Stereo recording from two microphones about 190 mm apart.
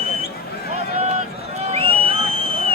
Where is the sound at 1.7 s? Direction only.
30° right (ahead or behind).